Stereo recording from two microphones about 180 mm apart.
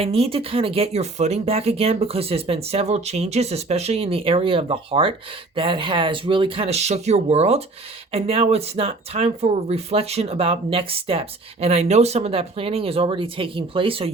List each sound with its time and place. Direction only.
0.0 s speech: 35° right (ahead or behind)